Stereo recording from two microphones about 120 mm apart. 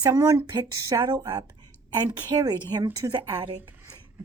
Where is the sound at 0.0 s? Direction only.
30° right (ahead or behind).